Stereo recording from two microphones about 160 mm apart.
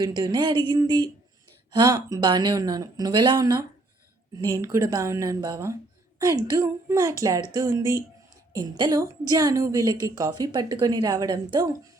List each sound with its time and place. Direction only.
0.0 s a woman's voice: 25° right (ahead or behind)
4.6 s a woman's voice: 20° right (ahead or behind)